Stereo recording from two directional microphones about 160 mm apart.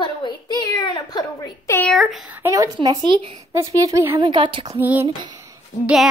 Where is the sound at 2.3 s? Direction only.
20° right (ahead or behind).